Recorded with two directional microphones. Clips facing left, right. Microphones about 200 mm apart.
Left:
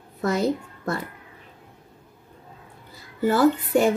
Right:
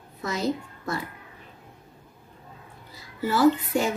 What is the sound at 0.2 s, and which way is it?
Speech, 55° left (ahead or behind).